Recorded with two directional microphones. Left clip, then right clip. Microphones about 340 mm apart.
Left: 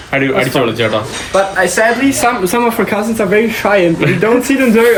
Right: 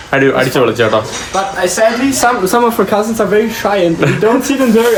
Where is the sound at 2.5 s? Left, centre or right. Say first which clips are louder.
Right 2 dB; centre.